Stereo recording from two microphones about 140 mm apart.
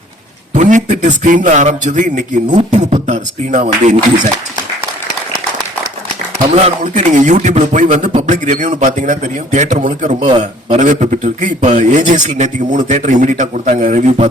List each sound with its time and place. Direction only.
0.5 s speech: 60° right (ahead or behind)
6.5 s speech: 50° right (ahead or behind)